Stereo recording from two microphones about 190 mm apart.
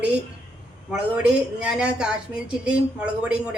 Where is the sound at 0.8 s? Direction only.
5° right (ahead or behind).